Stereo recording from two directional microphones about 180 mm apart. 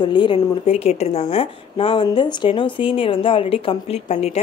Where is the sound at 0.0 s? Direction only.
25° left (ahead or behind).